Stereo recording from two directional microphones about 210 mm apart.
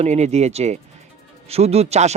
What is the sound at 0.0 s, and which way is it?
Speech, 30° right (ahead or behind).